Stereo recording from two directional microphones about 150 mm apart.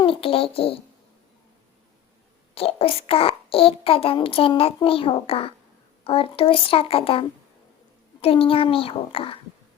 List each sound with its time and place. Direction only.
0.0 s a child's voice: 40° left (ahead or behind)
2.6 s a child's voice: 40° left (ahead or behind)